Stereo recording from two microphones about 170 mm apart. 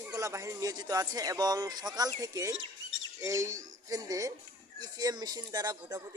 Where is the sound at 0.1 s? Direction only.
20° right (ahead or behind).